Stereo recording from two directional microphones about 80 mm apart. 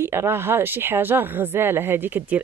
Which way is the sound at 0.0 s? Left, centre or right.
Right.